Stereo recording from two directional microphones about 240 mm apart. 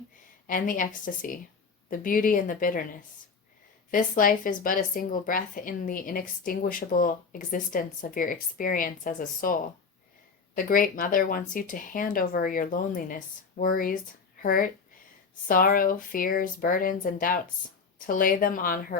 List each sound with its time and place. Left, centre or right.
0.4 s speech: left
3.9 s speech: left